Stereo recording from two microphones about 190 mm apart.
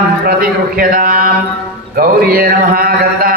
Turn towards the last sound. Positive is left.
turn(degrees=-50)  # may be behind; listen again after turning